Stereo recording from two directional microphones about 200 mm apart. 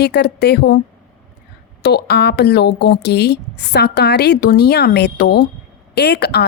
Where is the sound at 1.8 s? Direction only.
55° left (ahead or behind).